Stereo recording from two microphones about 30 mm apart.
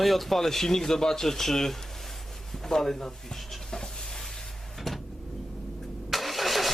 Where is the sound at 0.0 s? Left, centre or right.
Centre.